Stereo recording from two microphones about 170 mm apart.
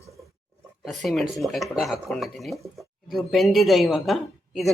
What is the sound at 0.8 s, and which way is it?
A woman's voice, centre (ahead or behind).